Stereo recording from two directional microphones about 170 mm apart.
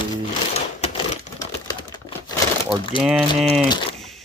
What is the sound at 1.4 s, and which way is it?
Typewriter, 25° left (ahead or behind).